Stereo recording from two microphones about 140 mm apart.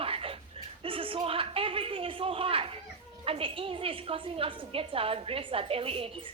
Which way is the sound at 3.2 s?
40° right (ahead or behind).